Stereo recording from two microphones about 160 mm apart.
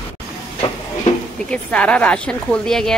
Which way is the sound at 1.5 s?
5° left (ahead or behind).